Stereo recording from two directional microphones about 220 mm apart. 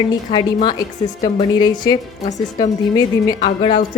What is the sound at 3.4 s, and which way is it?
Music, 30° left (ahead or behind).